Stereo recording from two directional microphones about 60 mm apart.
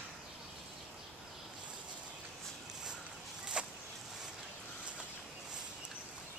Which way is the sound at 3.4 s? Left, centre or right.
Centre.